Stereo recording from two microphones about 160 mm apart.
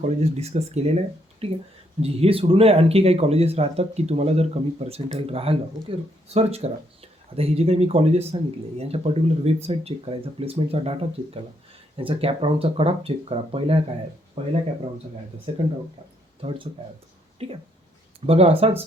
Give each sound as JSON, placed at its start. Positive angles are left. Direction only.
{"t": 0.0, "sound": "speech", "side_deg": -40}
{"t": 11.9, "sound": "speech", "side_deg": -35}
{"t": 17.4, "sound": "speech", "side_deg": -40}